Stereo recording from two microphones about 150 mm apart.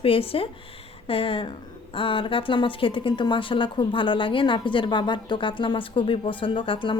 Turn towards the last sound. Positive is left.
turn(degrees=35)  # may be behind; listen again after turning